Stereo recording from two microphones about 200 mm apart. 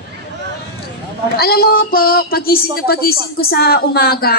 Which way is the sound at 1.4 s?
50° left (ahead or behind).